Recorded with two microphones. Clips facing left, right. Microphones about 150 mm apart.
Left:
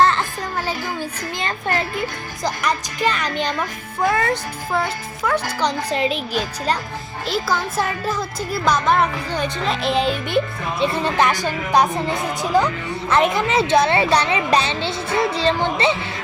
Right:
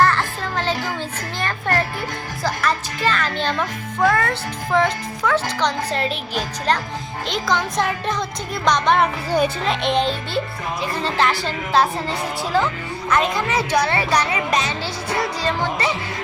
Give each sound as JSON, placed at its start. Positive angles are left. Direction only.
{"t": 0.0, "sound": "music", "side_deg": 20}
{"t": 0.5, "sound": "a sound", "side_deg": 10}
{"t": 2.4, "sound": "music", "side_deg": 15}
{"t": 4.0, "sound": "a woman's voice", "side_deg": 10}